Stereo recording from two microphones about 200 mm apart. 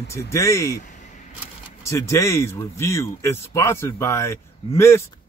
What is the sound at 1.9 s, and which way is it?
Speech, 15° left (ahead or behind).